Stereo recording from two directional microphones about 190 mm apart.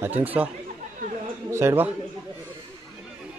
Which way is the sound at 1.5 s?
15° right (ahead or behind).